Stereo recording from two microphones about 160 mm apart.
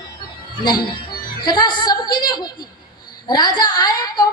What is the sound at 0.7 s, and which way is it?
A woman's voice, 25° left (ahead or behind).